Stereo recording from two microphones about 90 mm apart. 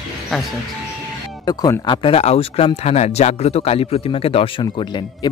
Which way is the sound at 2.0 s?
90° left.